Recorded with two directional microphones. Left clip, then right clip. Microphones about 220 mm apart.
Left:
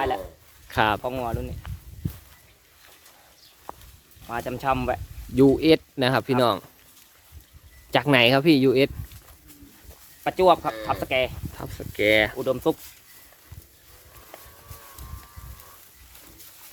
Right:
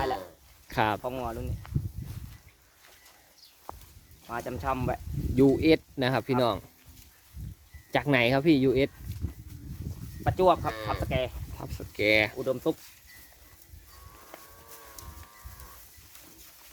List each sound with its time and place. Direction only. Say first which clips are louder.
0.7 s speech: left 5 dB; 10° left (ahead or behind)
1.0 s speech: left 5 dB; 40° left (ahead or behind)
3.7 s a sound: left 4 dB; 10° left (ahead or behind)
4.3 s speech: left 6 dB; 45° left (ahead or behind)
5.4 s speech: left 5 dB; 10° left (ahead or behind)
7.9 s speech: left 6 dB; 15° left (ahead or behind)
10.2 s speech: left 5 dB; 40° left (ahead or behind)
11.5 s speech: left 5 dB; 10° left (ahead or behind)
12.4 s speech: left 5 dB; 40° left (ahead or behind)